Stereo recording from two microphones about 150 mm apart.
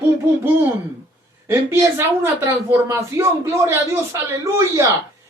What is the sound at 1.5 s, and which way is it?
Speech, 20° right (ahead or behind).